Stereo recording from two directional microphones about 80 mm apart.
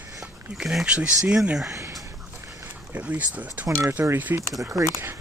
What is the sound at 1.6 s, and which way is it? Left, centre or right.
Speech, right.